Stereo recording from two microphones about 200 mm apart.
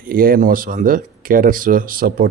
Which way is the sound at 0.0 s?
45° right (ahead or behind).